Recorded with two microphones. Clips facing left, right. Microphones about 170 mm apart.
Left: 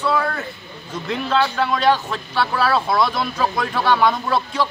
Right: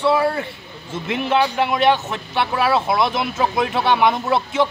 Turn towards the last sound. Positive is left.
turn(degrees=-20)  # may be behind; listen again after turning